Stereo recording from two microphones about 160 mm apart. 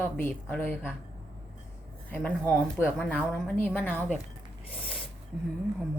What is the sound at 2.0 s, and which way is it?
Speech, 10° left (ahead or behind).